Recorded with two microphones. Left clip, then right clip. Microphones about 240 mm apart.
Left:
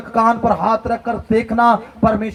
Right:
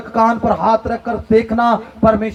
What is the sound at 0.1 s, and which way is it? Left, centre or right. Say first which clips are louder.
Speech: even; left.